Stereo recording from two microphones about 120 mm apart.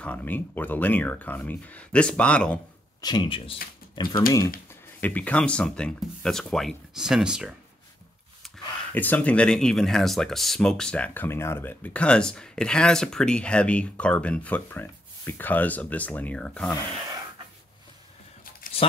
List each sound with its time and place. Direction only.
0.0 s speech: 15° left (ahead or behind)
3.0 s speech: 35° left (ahead or behind)
5.0 s speech: 15° left (ahead or behind); by 7.5 s 5° right (ahead or behind)
8.9 s speech: 15° left (ahead or behind)